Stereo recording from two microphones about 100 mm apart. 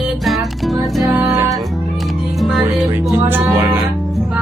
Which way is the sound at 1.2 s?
25° right (ahead or behind).